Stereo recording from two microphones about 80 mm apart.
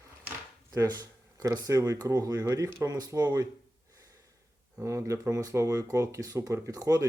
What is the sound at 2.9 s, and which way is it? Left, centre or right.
Speech, right.